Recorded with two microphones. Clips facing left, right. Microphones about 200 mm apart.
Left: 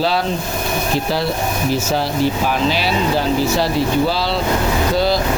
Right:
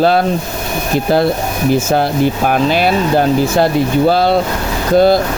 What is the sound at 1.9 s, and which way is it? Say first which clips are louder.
Speech: right 4 dB; 55° right (ahead or behind).